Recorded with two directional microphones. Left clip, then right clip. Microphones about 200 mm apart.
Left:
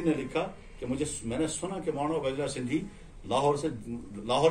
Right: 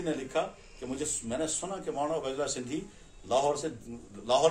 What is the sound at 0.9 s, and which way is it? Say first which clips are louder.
A man's voice: left 1 dB; 25° right (ahead or behind).